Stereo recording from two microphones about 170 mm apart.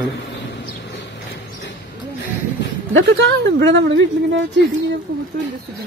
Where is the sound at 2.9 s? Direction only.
90° right.